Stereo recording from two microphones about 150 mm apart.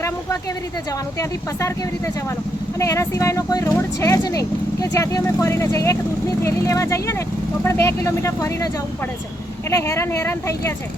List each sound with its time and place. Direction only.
2.7 s speech: 20° left (ahead or behind)